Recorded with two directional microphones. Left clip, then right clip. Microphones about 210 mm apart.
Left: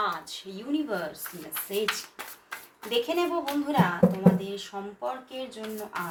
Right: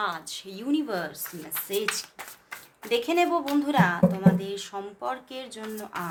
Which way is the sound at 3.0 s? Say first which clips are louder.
Right 4 dB; 50° right (ahead or behind).